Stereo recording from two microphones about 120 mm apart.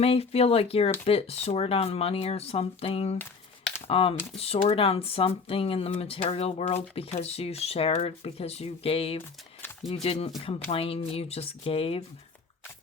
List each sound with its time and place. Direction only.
0.0 s speech: 55° left (ahead or behind)